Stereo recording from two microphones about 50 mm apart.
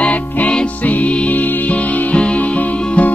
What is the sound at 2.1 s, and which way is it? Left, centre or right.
Music, left.